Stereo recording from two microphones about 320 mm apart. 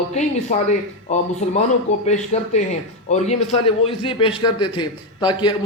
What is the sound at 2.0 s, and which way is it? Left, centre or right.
A man's voice, left.